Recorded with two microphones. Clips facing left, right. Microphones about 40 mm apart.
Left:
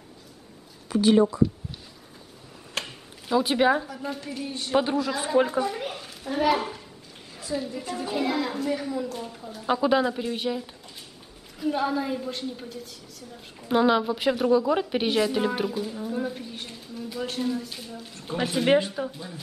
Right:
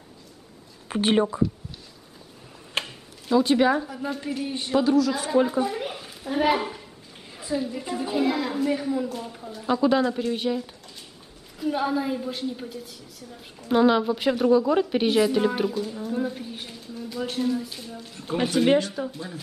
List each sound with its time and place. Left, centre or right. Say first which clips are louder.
0.8 s a woman's voice: left 2 dB; right
2.8 s a sound: right 1 dB; centre
3.8 s speech: right 3 dB; centre
4.7 s a man's voice: right 3 dB; left
5.5 s a woman's voice: right 1 dB; centre
7.3 s a sound: right 2 dB; centre
7.9 s a woman's voice: right 2 dB; centre
9.7 s a woman's voice: right 1 dB; centre
18.7 s speech: left 4 dB; centre